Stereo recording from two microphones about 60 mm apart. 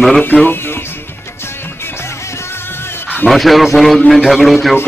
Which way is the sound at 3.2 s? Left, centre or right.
Centre.